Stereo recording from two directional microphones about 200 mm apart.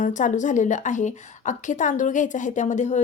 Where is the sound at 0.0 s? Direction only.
40° left (ahead or behind).